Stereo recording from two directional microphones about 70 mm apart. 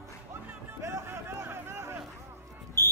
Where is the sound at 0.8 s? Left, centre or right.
Right.